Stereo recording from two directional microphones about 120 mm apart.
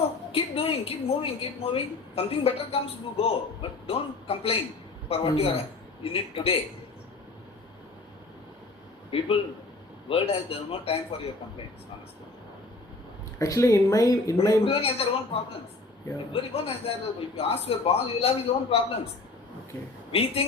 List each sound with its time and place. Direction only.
0.3 s a woman's voice: 50° left (ahead or behind)
9.0 s a man's voice: 50° left (ahead or behind)
13.4 s speech: 25° left (ahead or behind)
14.6 s a woman's voice: 55° left (ahead or behind)
20.1 s speech: 55° left (ahead or behind)